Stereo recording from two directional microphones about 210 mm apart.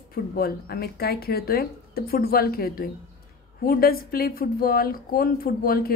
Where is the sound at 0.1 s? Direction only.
45° left (ahead or behind).